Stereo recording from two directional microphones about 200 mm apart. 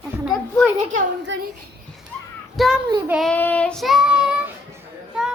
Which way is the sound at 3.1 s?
Centre (ahead or behind).